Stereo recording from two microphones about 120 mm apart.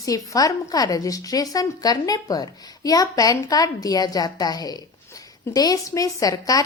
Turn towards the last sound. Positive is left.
turn(degrees=30)  # may be behind; listen again after turning